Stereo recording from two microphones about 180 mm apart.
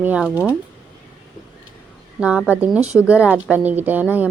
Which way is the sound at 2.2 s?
5° right (ahead or behind).